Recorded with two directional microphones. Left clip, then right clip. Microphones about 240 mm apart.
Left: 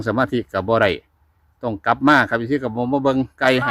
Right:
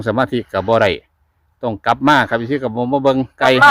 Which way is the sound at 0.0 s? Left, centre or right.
Right.